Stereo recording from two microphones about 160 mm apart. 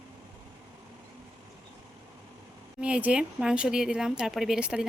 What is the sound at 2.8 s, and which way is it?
A woman's voice, 5° right (ahead or behind).